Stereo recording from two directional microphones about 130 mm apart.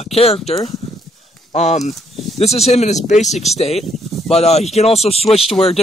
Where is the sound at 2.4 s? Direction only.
55° left (ahead or behind).